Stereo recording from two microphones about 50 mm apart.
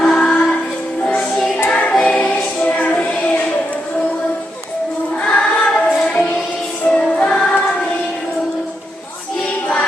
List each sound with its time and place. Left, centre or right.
0.0 s music: centre
1.9 s choir: centre
2.6 s music: left
3.2 s music: centre
5.2 s music: left